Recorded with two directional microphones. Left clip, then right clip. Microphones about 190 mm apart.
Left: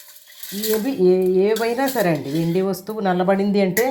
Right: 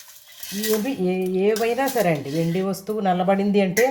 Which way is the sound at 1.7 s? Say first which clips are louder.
Left 1 dB; centre (ahead or behind).